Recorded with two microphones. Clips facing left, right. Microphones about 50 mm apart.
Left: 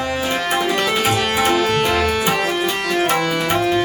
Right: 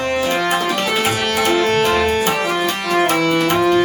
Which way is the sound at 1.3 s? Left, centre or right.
Left.